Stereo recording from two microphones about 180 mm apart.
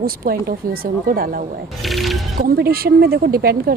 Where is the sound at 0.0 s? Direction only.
55° right (ahead or behind).